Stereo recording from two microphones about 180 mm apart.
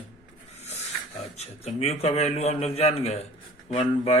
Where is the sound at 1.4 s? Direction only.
35° left (ahead or behind).